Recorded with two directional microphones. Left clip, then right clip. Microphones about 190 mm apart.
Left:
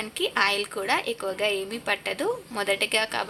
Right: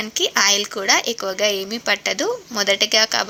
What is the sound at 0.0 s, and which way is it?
A woman's voice, 20° right (ahead or behind).